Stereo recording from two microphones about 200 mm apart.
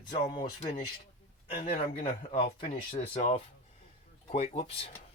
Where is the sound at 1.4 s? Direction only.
25° left (ahead or behind).